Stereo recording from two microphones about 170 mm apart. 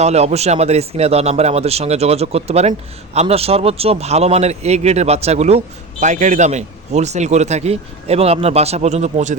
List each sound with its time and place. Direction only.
0.0 s a man's voice: 40° right (ahead or behind)